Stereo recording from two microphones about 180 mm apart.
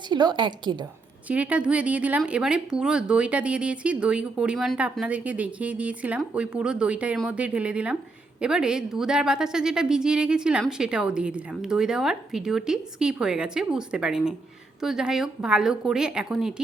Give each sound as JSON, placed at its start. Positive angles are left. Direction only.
{"t": 0.1, "sound": "a woman's voice", "side_deg": -25}
{"t": 1.3, "sound": "a woman's voice", "side_deg": -5}